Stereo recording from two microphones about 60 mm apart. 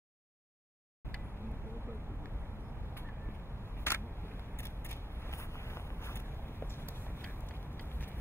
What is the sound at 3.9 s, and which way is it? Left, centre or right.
Vehicle, left.